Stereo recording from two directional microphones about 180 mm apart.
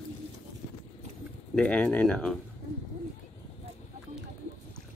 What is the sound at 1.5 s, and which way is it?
Speech, 5° left (ahead or behind).